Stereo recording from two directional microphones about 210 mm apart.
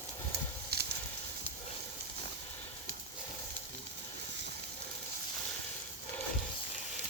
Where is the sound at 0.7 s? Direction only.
50° right (ahead or behind).